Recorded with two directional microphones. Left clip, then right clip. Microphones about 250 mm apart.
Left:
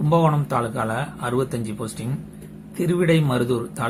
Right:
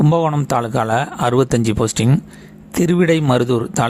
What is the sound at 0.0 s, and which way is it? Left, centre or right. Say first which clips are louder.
Speech: right 3 dB; right.